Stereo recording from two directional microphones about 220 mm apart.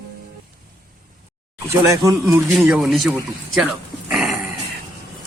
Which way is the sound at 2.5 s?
Centre (ahead or behind).